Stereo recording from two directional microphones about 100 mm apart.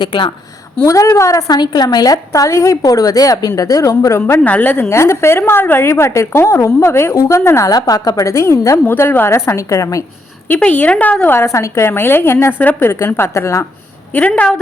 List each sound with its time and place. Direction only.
0.0 s a woman's voice: 55° left (ahead or behind)
0.9 s a woman's voice: 35° left (ahead or behind)
4.4 s a woman's voice: 15° left (ahead or behind)
7.7 s a woman's voice: 40° left (ahead or behind)
10.5 s a woman's voice: 15° left (ahead or behind)
14.1 s a woman's voice: 15° left (ahead or behind)